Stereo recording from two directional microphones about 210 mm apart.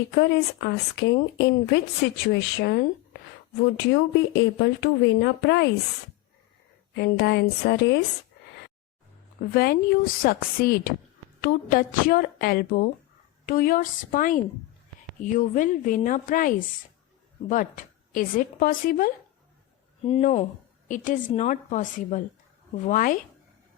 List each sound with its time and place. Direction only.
0.1 s speech: 55° left (ahead or behind)
6.9 s speech: 55° left (ahead or behind)
9.4 s a woman's voice: 45° left (ahead or behind)
20.1 s a woman's voice: 30° left (ahead or behind)